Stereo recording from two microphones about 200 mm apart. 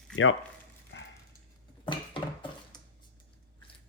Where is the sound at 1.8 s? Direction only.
25° left (ahead or behind).